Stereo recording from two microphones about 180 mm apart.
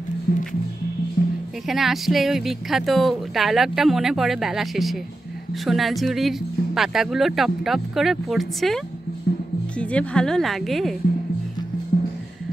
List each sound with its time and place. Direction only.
0.3 s music: 60° left (ahead or behind)
1.7 s speech: centre (ahead or behind)